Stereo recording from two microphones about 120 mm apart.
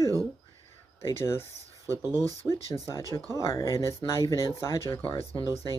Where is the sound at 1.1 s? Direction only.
20° left (ahead or behind).